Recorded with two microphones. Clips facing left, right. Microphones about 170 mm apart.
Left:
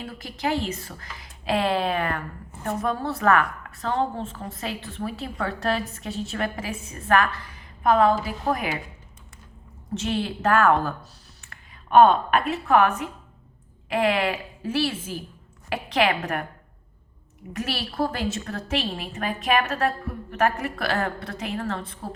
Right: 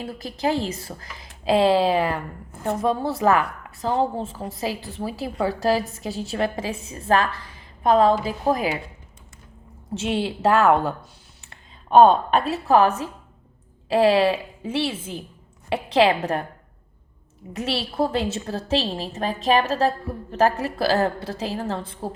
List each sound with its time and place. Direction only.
0.0 s a woman's voice: 35° right (ahead or behind)
10.0 s a woman's voice: 25° right (ahead or behind)
12.0 s a woman's voice: 30° right (ahead or behind)
17.5 s a woman's voice: 25° right (ahead or behind)